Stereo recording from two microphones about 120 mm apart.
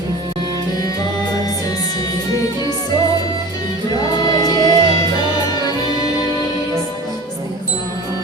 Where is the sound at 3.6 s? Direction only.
35° left (ahead or behind).